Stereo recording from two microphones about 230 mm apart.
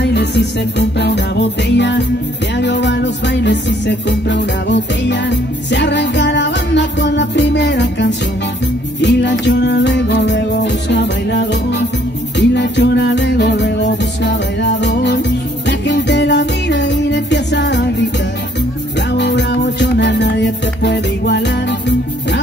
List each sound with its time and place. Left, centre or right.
0.0 s music: left
19.1 s music: left